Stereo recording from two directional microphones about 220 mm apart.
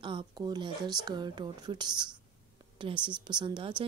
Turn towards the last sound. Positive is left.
turn(degrees=-20)  # may be behind; listen again after turning